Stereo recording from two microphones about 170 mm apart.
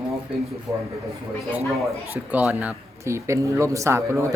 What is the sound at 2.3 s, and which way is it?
Speech, 10° right (ahead or behind).